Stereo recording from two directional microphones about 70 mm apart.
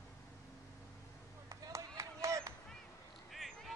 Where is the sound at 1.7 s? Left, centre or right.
Right.